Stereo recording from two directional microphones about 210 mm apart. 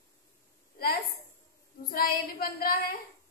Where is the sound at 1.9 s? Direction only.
45° left (ahead or behind).